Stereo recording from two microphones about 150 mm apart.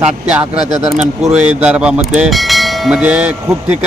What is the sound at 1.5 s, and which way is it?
Bell, 5° right (ahead or behind).